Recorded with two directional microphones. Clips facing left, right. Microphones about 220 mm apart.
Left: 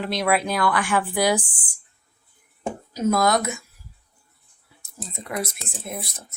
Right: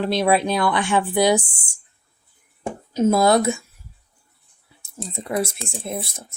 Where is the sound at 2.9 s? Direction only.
25° right (ahead or behind).